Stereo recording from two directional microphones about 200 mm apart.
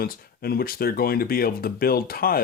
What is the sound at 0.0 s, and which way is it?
Speech, 50° left (ahead or behind).